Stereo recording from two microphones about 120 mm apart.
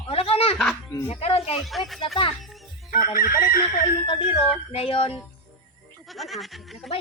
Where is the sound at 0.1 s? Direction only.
55° left (ahead or behind).